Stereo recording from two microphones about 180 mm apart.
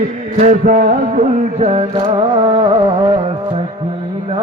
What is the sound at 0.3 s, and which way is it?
Music, 45° right (ahead or behind).